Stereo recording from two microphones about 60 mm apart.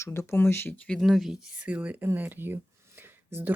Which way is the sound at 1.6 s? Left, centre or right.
Right.